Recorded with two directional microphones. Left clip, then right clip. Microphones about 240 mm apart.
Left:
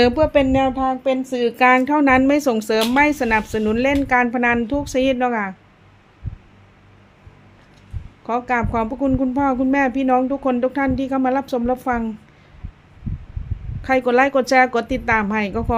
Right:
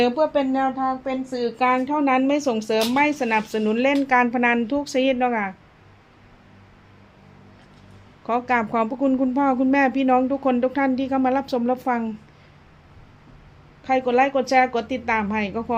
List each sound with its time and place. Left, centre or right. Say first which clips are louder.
0.0 s speech: left 4 dB; left
8.3 s speech: left 1 dB; centre
13.8 s speech: left 3 dB; left